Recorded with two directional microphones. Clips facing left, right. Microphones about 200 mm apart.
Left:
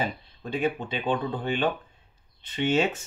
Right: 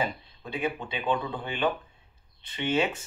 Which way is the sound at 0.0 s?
45° left (ahead or behind).